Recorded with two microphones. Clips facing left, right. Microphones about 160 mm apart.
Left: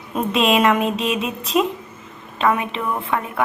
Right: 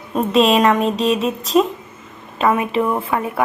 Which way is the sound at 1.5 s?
35° right (ahead or behind).